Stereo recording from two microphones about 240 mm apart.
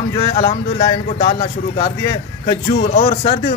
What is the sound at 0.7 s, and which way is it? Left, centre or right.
Speech, centre.